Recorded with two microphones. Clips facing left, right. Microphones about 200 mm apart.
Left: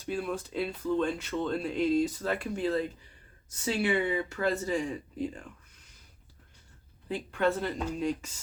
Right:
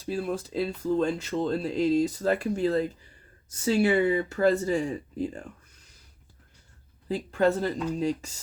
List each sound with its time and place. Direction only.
0.0 s speech: 35° right (ahead or behind)
7.1 s speech: 35° right (ahead or behind)